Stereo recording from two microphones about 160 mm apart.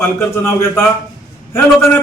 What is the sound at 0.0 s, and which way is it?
Speech, 15° left (ahead or behind).